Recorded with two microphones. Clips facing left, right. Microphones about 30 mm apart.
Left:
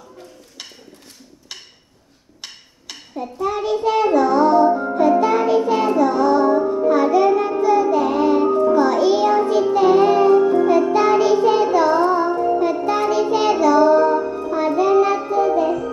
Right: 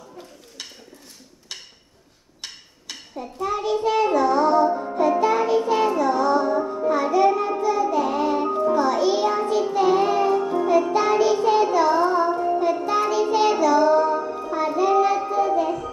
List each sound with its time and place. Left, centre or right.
2.4 s child singing: centre
4.6 s music: centre
5.0 s child singing: centre